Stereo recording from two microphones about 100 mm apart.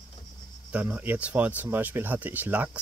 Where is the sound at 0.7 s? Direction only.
15° right (ahead or behind).